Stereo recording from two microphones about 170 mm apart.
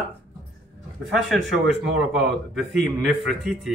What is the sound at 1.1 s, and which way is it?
Speech, centre (ahead or behind).